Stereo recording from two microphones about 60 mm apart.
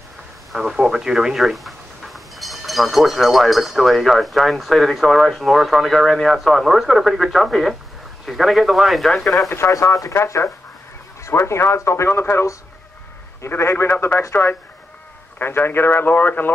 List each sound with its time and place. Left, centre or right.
0.5 s speech: centre
10.1 s speech: left
13.6 s speech: left